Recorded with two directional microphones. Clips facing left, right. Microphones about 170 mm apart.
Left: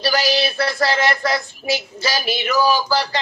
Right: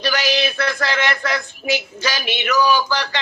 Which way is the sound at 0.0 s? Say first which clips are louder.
Left 1 dB; 40° left (ahead or behind).